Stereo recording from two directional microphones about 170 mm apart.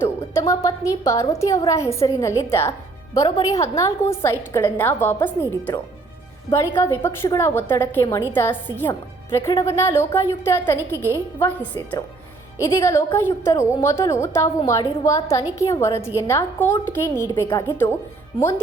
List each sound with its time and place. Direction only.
0.0 s a woman's voice: 15° left (ahead or behind)